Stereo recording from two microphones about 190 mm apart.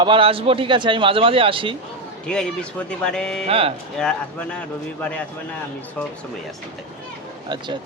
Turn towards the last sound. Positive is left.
turn(degrees=-25)  # may be behind; listen again after turning